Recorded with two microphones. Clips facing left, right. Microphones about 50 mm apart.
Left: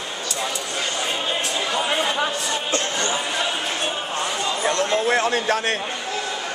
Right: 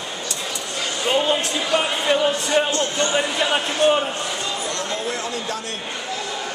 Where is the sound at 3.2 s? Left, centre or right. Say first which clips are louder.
Right 4 dB; right.